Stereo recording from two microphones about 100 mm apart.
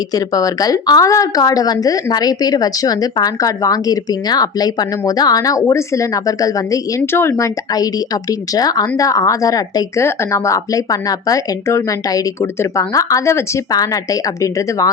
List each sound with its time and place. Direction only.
0.1 s speech: 35° left (ahead or behind)
10.0 s speech: 25° left (ahead or behind)